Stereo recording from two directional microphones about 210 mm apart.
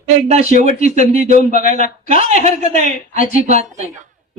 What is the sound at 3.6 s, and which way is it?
Speech, 35° right (ahead or behind).